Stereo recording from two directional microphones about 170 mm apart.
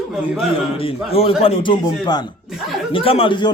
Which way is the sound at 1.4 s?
30° left (ahead or behind).